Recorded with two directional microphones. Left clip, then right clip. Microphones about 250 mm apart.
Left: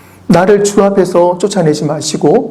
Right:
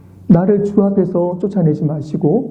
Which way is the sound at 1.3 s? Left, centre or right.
Centre.